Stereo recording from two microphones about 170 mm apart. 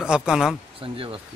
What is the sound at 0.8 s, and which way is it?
Speech, 30° right (ahead or behind).